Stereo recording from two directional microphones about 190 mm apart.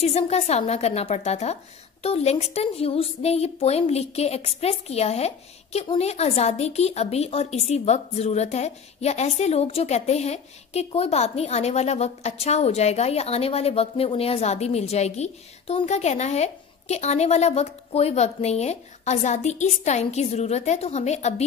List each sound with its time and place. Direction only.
0.0 s a woman's voice: 35° left (ahead or behind)